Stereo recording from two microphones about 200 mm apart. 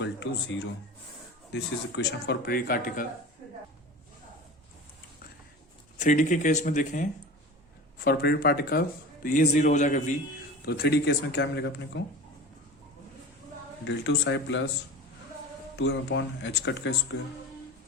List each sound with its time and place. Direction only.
0.0 s speech: 60° left (ahead or behind); by 3.1 s 45° left (ahead or behind)
6.0 s speech: 40° left (ahead or behind)
8.0 s speech: 50° left (ahead or behind)
9.2 s speech: 40° left (ahead or behind)
10.7 s speech: 55° left (ahead or behind)
13.8 s speech: 65° left (ahead or behind)
15.7 s speech: 60° left (ahead or behind)